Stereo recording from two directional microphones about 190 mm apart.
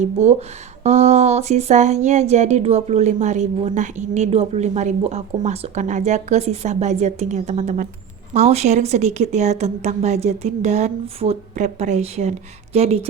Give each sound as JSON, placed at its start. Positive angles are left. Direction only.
{"t": 0.0, "sound": "speech", "side_deg": -35}